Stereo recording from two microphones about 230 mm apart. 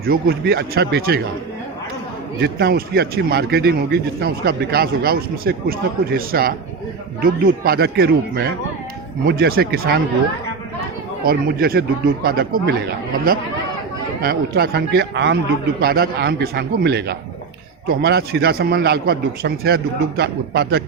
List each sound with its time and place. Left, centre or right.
0.0 s a man's voice: right
2.4 s a man's voice: right
11.2 s a man's voice: right